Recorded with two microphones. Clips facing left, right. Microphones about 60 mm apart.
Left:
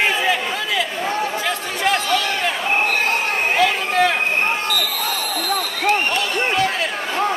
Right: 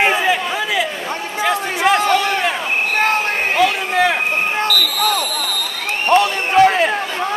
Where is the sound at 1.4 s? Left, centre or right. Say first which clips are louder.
Right 5 dB; centre.